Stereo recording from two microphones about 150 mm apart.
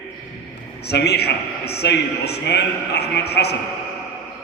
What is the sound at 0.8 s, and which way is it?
A man's voice, 90° left.